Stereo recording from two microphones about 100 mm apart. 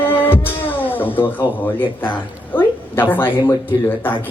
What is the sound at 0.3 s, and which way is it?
Music, 20° left (ahead or behind).